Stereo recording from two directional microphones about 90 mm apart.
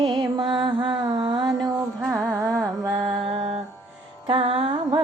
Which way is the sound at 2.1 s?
30° right (ahead or behind).